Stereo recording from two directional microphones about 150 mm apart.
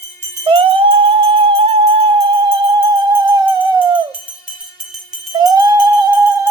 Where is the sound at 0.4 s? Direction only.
35° right (ahead or behind).